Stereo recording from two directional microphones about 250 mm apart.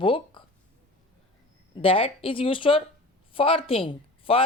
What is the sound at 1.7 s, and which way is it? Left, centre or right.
A woman's voice, left.